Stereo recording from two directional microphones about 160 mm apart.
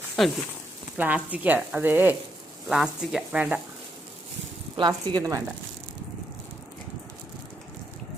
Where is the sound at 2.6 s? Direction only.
5° right (ahead or behind).